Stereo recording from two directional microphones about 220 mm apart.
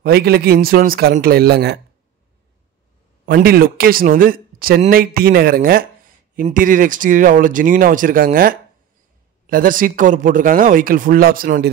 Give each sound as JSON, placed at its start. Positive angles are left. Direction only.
{"t": 0.0, "sound": "a man's voice", "side_deg": -45}
{"t": 3.3, "sound": "speech", "side_deg": -45}